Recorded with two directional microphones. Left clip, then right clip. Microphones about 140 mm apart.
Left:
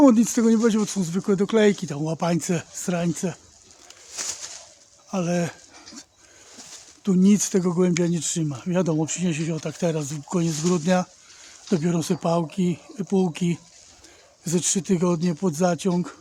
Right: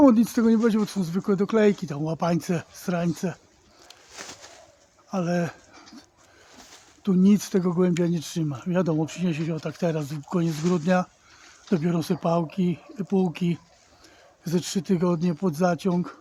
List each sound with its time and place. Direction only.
0.0 s speech: 15° left (ahead or behind)
4.1 s bird: 45° left (ahead or behind)
5.1 s dog: 10° left (ahead or behind)
7.0 s speech: 15° left (ahead or behind)